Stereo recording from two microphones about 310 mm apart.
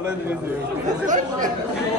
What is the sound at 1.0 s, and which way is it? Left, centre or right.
Speech, right.